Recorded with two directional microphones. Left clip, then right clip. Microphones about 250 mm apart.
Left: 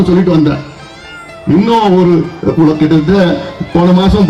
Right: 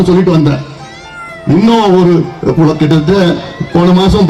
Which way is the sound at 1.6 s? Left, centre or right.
Right.